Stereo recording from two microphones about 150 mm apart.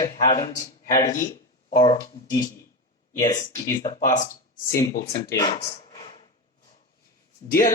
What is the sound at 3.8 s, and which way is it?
Speech, 50° left (ahead or behind).